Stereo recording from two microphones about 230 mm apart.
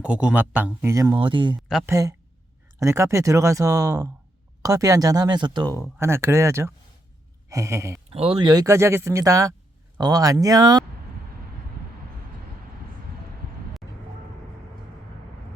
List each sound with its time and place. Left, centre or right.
0.0 s speech: centre
8.1 s speech: right